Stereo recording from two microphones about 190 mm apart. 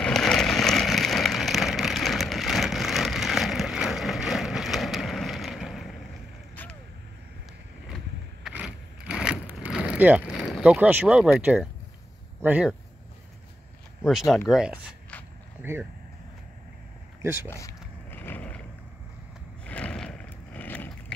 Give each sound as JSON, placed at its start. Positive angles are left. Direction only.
{"t": 0.0, "sound": "vehicle", "side_deg": 5}
{"t": 6.5, "sound": "creak", "side_deg": 10}
{"t": 8.5, "sound": "vehicle", "side_deg": -5}
{"t": 12.4, "sound": "speech", "side_deg": -10}
{"t": 14.0, "sound": "speech", "side_deg": 0}
{"t": 17.2, "sound": "speech", "side_deg": -15}
{"t": 17.5, "sound": "speech", "side_deg": 15}
{"t": 18.1, "sound": "a sound", "side_deg": 10}
{"t": 19.6, "sound": "a sound", "side_deg": 5}